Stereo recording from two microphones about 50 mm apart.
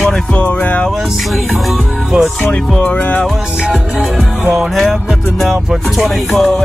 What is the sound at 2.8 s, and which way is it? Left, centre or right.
Music, left.